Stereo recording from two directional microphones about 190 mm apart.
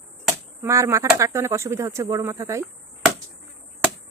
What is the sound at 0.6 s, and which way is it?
Speech, 15° right (ahead or behind).